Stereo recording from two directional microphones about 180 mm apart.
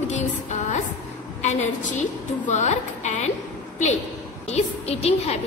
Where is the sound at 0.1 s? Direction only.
40° left (ahead or behind).